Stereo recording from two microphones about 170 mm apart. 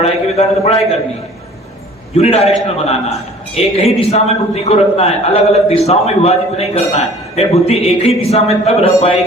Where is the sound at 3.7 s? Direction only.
35° left (ahead or behind).